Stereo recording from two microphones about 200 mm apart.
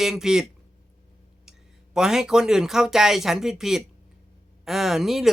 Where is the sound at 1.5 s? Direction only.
Centre (ahead or behind).